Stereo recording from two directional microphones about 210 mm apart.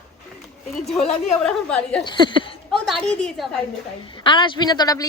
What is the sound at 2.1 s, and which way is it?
Speech, 20° left (ahead or behind).